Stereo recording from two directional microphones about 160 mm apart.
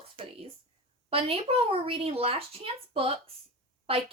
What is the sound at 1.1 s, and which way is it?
Speech, 35° right (ahead or behind).